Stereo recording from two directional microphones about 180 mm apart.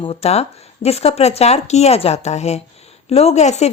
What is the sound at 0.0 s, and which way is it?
A woman's voice, 35° left (ahead or behind).